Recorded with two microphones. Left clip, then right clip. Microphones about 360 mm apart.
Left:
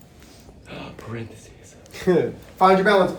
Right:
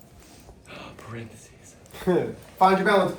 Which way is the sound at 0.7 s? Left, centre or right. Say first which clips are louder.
Left 5 dB; left.